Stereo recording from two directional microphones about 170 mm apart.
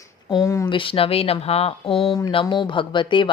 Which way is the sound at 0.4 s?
20° left (ahead or behind).